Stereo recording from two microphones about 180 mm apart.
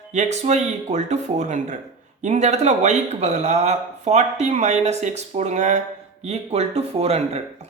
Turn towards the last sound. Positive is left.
turn(degrees=-35)  # may be behind; listen again after turning